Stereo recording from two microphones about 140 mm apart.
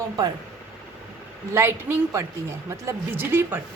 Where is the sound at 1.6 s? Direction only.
15° right (ahead or behind).